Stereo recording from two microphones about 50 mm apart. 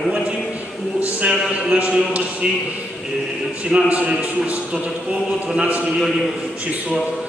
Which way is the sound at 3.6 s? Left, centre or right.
Right.